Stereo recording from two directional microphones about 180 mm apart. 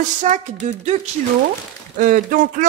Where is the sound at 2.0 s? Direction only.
50° right (ahead or behind).